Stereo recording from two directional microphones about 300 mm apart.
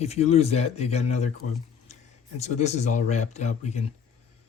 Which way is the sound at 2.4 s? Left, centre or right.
Left.